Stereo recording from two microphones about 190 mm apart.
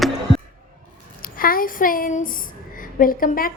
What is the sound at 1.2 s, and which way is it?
A woman's voice, 50° left (ahead or behind).